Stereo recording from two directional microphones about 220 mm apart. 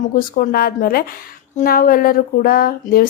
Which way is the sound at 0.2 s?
40° left (ahead or behind).